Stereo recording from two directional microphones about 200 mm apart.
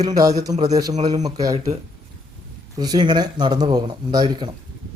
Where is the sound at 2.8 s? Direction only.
20° right (ahead or behind).